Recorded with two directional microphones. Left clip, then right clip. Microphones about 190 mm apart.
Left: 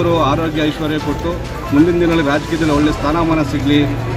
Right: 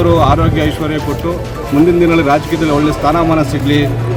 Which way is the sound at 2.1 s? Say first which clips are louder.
Right 4 dB; centre (ahead or behind).